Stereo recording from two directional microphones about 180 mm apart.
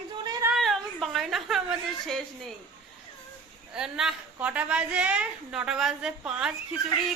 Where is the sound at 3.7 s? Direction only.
5° right (ahead or behind).